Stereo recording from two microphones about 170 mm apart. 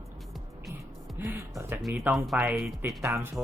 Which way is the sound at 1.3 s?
15° right (ahead or behind).